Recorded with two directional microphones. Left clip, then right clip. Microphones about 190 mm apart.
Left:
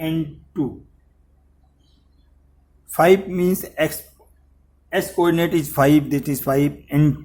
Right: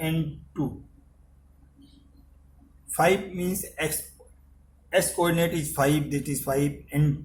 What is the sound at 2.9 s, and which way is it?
A man's voice, 45° left (ahead or behind).